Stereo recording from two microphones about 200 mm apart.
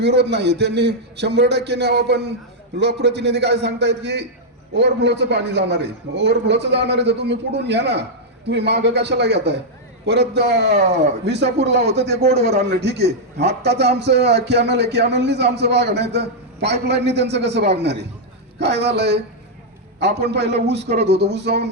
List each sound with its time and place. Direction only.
0.0 s a man's voice: 55° right (ahead or behind)
20.5 s a man's voice: 55° right (ahead or behind)